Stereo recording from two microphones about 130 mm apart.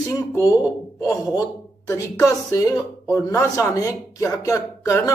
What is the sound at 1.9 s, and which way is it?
A man's voice, 25° left (ahead or behind).